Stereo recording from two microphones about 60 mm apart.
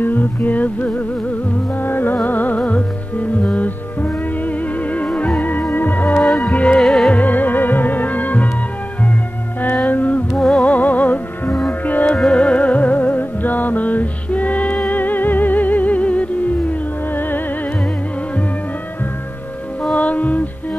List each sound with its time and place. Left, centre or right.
0.0 s music: left
6.4 s music: centre
6.7 s music: centre
7.1 s music: left
9.8 s music: left
17.1 s music: left
19.8 s music: left